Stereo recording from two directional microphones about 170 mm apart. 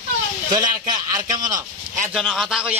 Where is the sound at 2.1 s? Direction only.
Centre (ahead or behind).